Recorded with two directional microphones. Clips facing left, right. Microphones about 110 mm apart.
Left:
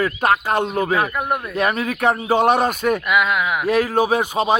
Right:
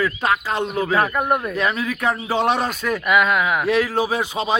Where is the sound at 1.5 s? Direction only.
55° left (ahead or behind).